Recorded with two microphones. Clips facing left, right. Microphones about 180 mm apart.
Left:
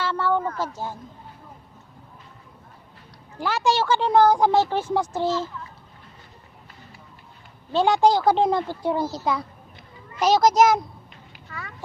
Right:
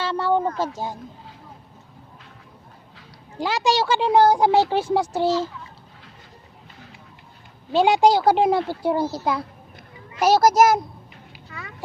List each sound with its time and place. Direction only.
0.0 s speech: 15° right (ahead or behind)
3.3 s speech: 15° right (ahead or behind)
7.7 s a child's voice: 10° right (ahead or behind)